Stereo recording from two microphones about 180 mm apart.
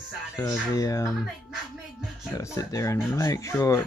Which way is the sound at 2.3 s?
15° left (ahead or behind).